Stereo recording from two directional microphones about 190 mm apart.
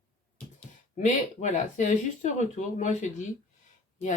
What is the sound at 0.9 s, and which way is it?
Speech, 40° left (ahead or behind).